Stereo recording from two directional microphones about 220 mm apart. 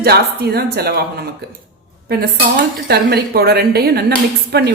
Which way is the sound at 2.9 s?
45° right (ahead or behind).